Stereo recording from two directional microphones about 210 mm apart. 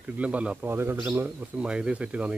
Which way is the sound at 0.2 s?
5° right (ahead or behind).